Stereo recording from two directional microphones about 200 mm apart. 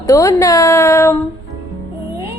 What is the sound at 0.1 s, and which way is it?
A woman's voice, 15° left (ahead or behind).